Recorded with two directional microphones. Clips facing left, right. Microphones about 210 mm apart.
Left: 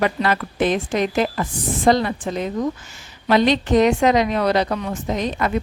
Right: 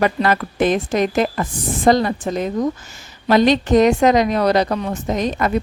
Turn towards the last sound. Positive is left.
turn(degrees=-45)  # may be behind; listen again after turning